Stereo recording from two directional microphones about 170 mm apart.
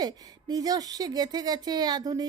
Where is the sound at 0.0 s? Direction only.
25° right (ahead or behind).